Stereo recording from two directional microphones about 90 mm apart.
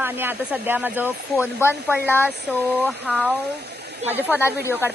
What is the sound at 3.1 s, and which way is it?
Speech, 15° right (ahead or behind).